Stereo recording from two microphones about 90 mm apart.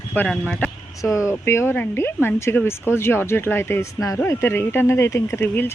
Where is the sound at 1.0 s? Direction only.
35° left (ahead or behind).